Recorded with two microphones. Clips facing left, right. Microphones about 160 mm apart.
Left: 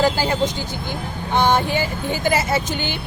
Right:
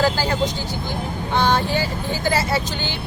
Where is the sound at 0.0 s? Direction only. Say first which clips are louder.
Left 1 dB; 20° left (ahead or behind).